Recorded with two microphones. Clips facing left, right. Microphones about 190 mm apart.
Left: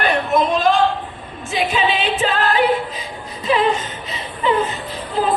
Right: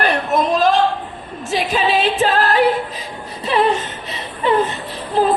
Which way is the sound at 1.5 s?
40° right (ahead or behind).